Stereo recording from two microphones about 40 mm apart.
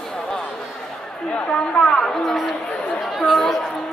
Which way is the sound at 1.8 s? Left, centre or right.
Centre.